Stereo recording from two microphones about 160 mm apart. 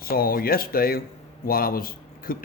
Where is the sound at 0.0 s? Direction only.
70° left (ahead or behind).